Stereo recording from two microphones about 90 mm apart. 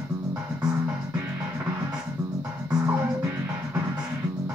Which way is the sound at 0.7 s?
15° right (ahead or behind).